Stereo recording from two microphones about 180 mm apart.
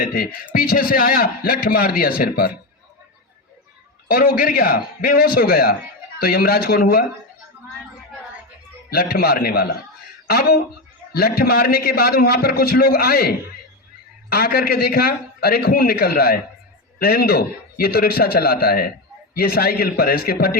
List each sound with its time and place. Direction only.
0.0 s a man's voice: 55° left (ahead or behind)
4.1 s a man's voice: 55° left (ahead or behind)
8.9 s a man's voice: 60° left (ahead or behind)